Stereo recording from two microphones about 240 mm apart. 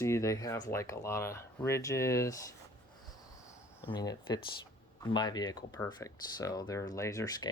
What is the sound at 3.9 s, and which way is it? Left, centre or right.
Speech, centre.